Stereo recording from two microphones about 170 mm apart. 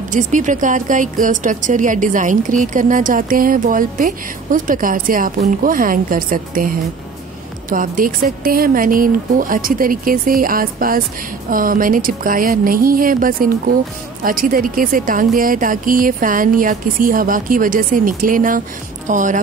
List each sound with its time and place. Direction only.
0.1 s a woman's voice: 50° right (ahead or behind)